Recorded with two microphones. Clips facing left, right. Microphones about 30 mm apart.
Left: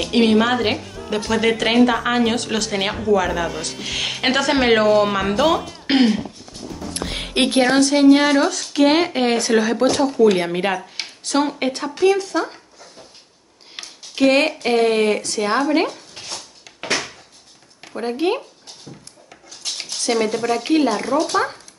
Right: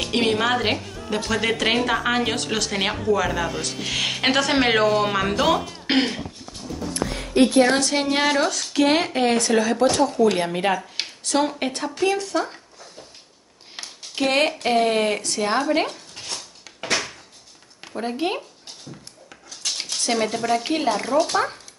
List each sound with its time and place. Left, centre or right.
0.0 s a woman's voice: centre
7.1 s a sound: left
7.6 s a woman's voice: centre
14.2 s a woman's voice: centre
16.3 s a sound: left
17.9 s speech: centre
18.9 s dog: centre
20.3 s a woman's voice: centre